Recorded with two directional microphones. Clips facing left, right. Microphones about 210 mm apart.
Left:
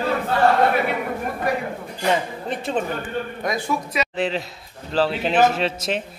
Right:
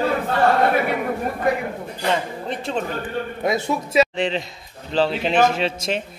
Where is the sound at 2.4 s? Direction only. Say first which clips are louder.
Left 2 dB; centre (ahead or behind).